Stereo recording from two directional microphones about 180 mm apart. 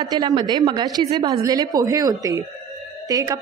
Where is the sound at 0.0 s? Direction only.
20° right (ahead or behind).